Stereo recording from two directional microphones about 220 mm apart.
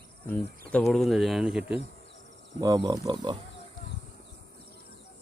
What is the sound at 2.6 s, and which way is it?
Speech, 20° right (ahead or behind).